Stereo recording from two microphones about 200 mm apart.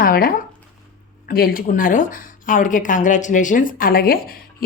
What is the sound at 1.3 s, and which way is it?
A woman's voice, 50° left (ahead or behind).